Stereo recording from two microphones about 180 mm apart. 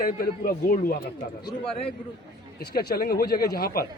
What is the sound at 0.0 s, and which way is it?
Speech, 55° left (ahead or behind).